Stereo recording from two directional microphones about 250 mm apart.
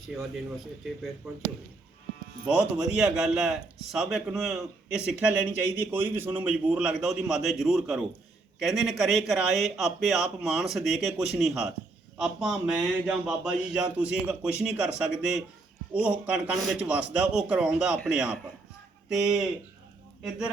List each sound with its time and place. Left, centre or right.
1.2 s a man's voice: centre
2.5 s a man's voice: centre